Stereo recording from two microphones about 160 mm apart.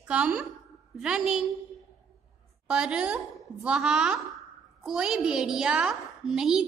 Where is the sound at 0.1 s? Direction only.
5° right (ahead or behind).